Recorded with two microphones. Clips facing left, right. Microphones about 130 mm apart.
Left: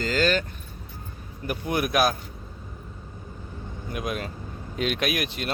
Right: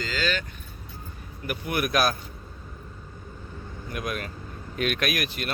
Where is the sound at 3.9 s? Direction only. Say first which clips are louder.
Left 2 dB; 20° left (ahead or behind).